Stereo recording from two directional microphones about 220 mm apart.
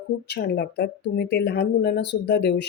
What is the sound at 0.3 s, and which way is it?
Speech, 45° left (ahead or behind).